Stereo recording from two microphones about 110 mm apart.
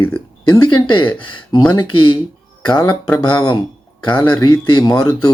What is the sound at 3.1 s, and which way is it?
Speech, 30° left (ahead or behind).